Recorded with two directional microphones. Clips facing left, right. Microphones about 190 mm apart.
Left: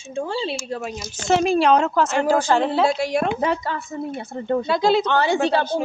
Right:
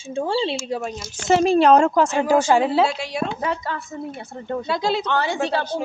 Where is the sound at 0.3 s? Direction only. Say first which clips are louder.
Right 6 dB; 30° right (ahead or behind).